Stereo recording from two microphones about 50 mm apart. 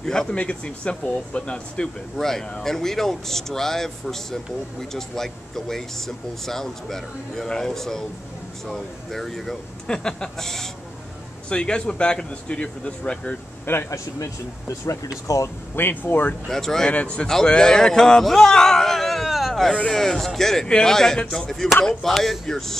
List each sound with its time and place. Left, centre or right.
0.0 s a man's voice: centre
2.1 s speech: centre
11.4 s a man's voice: centre
13.8 s speech: left
15.7 s speech: left
16.4 s speech: centre
16.9 s a man's voice: left
17.5 s speech: centre